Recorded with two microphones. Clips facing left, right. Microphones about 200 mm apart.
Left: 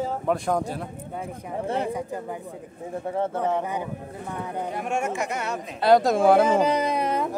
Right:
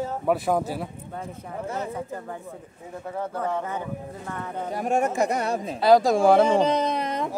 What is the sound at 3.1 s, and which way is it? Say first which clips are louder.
Speech: left 3 dB; 25° left (ahead or behind).